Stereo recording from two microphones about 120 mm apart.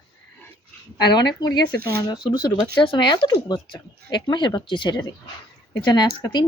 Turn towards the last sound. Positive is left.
turn(degrees=40)  # may be behind; listen again after turning